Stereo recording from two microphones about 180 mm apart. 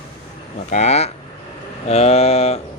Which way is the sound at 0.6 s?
40° left (ahead or behind).